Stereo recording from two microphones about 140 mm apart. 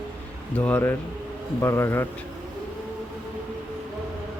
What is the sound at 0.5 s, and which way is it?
Speech, 10° left (ahead or behind).